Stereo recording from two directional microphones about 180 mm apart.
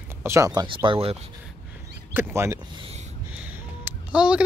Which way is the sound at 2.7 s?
35° right (ahead or behind).